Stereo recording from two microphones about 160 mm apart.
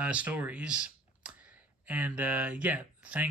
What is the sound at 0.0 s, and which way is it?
Speech, 10° right (ahead or behind).